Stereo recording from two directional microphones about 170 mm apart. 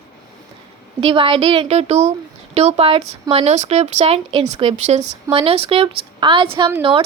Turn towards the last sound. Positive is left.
turn(degrees=-30)  # may be behind; listen again after turning